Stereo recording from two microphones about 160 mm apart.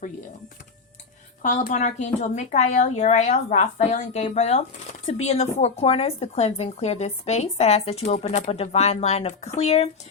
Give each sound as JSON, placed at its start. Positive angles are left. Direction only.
{"t": 1.4, "sound": "a woman's voice", "side_deg": 50}